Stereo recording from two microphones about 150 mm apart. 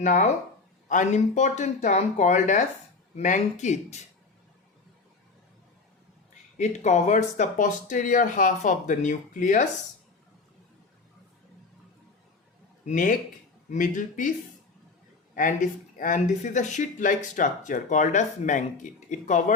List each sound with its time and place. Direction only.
0.0 s speech: 55° left (ahead or behind)
6.6 s speech: 50° left (ahead or behind)
12.8 s speech: 60° left (ahead or behind)
15.4 s speech: 65° left (ahead or behind)